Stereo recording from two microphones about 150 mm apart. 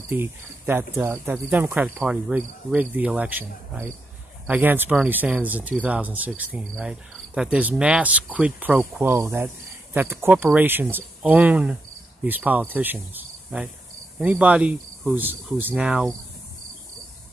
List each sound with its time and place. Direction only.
0.1 s speech: 15° right (ahead or behind)
2.0 s cricket: 5° right (ahead or behind)
2.3 s speech: 10° right (ahead or behind)
6.8 s insect: 5° right (ahead or behind)
7.5 s speech: 10° right (ahead or behind)
15.5 s cricket: 10° right (ahead or behind)